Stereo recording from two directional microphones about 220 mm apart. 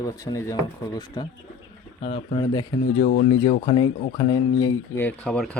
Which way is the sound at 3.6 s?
20° left (ahead or behind).